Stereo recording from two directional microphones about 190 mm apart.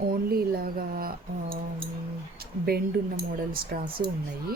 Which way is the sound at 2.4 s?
55° right (ahead or behind).